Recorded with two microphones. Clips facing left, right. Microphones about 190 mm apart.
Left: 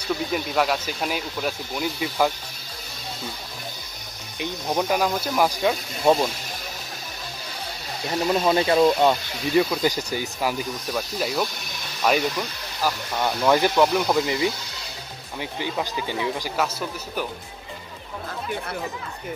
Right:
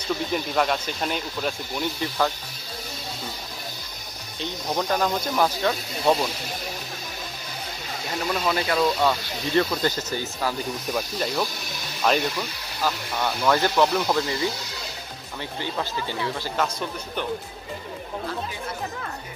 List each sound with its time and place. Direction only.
0.3 s speech: 5° left (ahead or behind)
4.4 s speech: 10° left (ahead or behind)
8.3 s speech: 25° left (ahead or behind)
9.5 s speech: 10° left (ahead or behind)
10.9 s speech: centre (ahead or behind)
15.6 s speech: 15° left (ahead or behind)